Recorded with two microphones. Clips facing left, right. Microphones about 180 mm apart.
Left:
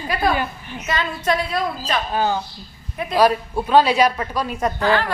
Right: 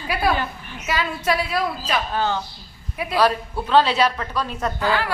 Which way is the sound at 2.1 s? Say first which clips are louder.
Left 2 dB; 10° left (ahead or behind).